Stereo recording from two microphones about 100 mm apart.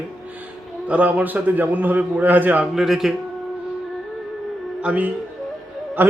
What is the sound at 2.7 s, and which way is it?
Speech, 5° right (ahead or behind).